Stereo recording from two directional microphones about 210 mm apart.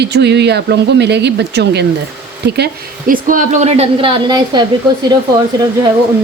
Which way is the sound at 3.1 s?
40° right (ahead or behind).